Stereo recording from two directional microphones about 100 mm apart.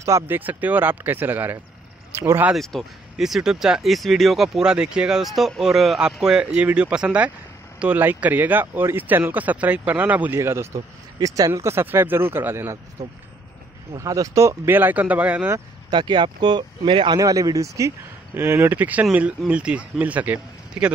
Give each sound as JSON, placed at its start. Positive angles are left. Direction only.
{"t": 0.3, "sound": "speech", "side_deg": -15}
{"t": 2.5, "sound": "speech", "side_deg": 0}
{"t": 10.4, "sound": "speech", "side_deg": -25}
{"t": 13.0, "sound": "speech", "side_deg": -35}
{"t": 15.9, "sound": "speech", "side_deg": -50}
{"t": 17.2, "sound": "speech", "side_deg": -35}